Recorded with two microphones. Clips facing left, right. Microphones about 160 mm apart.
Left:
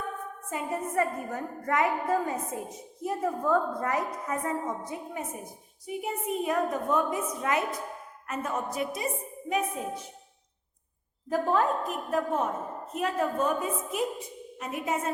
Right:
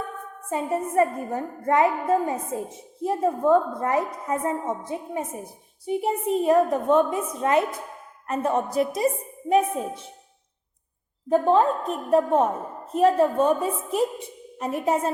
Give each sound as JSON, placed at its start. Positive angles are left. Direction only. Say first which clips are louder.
{"t": 0.5, "sound": "a woman's voice", "louder": "right 6 dB", "side_deg": -25}
{"t": 11.3, "sound": "a woman's voice", "louder": "right 7 dB", "side_deg": -25}